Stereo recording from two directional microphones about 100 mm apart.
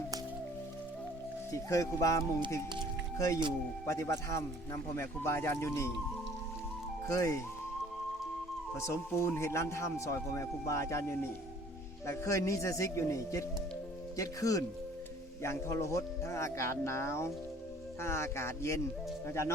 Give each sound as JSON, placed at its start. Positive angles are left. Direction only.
{"t": 1.5, "sound": "speech", "side_deg": 35}
{"t": 7.1, "sound": "speech", "side_deg": 30}
{"t": 8.7, "sound": "speech", "side_deg": 25}